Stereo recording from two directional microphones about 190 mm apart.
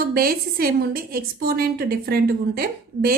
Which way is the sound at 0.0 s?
50° right (ahead or behind).